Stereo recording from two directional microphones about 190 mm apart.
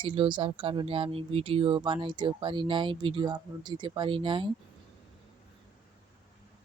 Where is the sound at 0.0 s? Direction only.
25° right (ahead or behind).